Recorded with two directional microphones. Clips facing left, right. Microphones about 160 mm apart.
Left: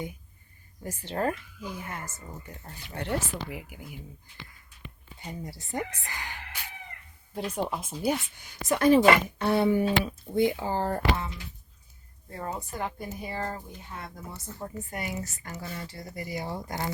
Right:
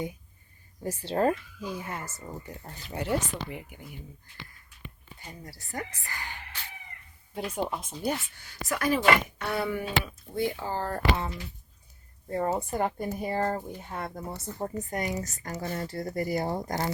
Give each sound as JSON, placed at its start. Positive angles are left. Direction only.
{"t": 1.1, "sound": "speech", "side_deg": -25}
{"t": 2.9, "sound": "speech", "side_deg": -5}
{"t": 5.2, "sound": "speech", "side_deg": 20}
{"t": 7.3, "sound": "speech", "side_deg": 0}
{"t": 12.5, "sound": "speech", "side_deg": -50}